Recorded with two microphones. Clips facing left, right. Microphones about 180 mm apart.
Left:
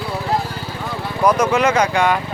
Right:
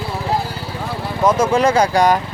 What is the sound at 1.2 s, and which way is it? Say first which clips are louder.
Speech: right 1 dB; 25° right (ahead or behind).